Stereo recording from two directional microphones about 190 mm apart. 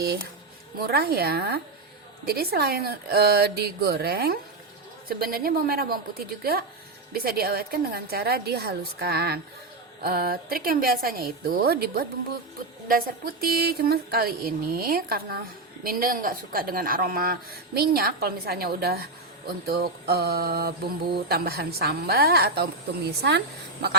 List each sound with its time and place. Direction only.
0.8 s mantra: 55° right (ahead or behind)
5.0 s a woman's voice: 50° right (ahead or behind)
7.1 s mantra: 55° right (ahead or behind)
10.0 s a woman's voice: 55° right (ahead or behind)
17.7 s mantra: 55° right (ahead or behind)